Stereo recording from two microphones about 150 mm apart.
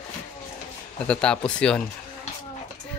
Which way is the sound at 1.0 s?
5° left (ahead or behind).